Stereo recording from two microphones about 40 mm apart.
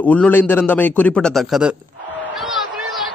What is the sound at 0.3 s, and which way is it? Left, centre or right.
Speech, left.